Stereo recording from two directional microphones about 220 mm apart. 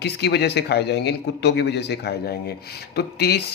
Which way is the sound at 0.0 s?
50° left (ahead or behind).